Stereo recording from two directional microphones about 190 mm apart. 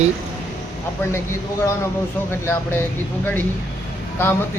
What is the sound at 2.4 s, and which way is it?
Speech, 10° left (ahead or behind).